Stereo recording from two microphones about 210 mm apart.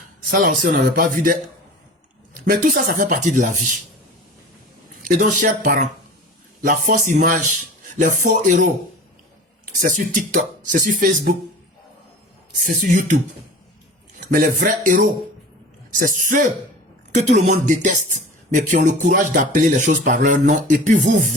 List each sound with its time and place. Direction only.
0.3 s speech: 45° right (ahead or behind)
2.4 s speech: 40° right (ahead or behind)
5.0 s speech: 40° right (ahead or behind)
12.6 s speech: 40° right (ahead or behind)
14.2 s speech: 40° right (ahead or behind)